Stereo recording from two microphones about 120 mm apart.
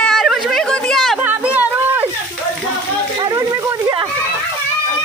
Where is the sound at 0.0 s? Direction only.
Centre (ahead or behind).